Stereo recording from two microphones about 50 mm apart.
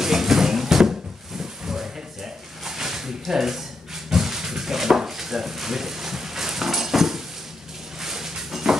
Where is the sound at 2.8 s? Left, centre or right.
Centre.